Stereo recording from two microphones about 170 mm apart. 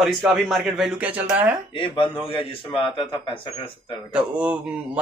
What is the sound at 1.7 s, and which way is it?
A man's voice, 30° left (ahead or behind).